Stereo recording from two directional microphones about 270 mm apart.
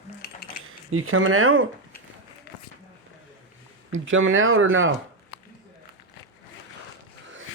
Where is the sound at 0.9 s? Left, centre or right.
Right.